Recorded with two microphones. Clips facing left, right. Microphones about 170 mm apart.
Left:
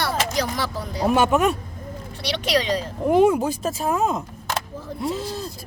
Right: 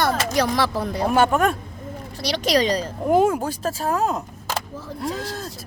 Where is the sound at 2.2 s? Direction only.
40° right (ahead or behind).